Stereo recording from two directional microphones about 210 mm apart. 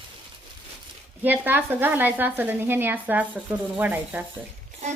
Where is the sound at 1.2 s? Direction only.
10° right (ahead or behind).